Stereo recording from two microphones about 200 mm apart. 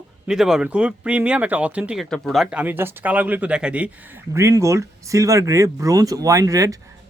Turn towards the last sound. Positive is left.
turn(degrees=-15)  # may be behind; listen again after turning